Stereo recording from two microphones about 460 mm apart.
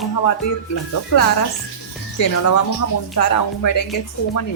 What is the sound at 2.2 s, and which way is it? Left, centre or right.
Speech, left.